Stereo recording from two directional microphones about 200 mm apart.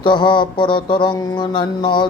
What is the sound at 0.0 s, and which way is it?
Speech, 25° left (ahead or behind).